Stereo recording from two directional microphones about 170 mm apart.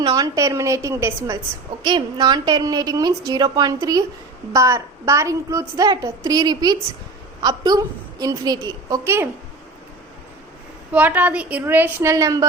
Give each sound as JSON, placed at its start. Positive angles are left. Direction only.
{"t": 0.0, "sound": "a woman's voice", "side_deg": -20}
{"t": 10.9, "sound": "a woman's voice", "side_deg": -10}